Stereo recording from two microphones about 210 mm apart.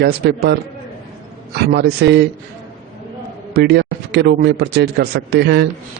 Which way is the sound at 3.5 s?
50° right (ahead or behind).